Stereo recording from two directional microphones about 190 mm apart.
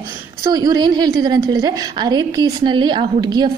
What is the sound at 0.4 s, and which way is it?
A woman's voice, 20° right (ahead or behind).